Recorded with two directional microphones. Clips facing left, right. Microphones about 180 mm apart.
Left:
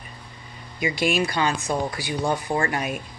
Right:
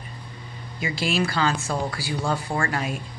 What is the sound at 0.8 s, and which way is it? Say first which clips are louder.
Speech: left 2 dB; 15° left (ahead or behind).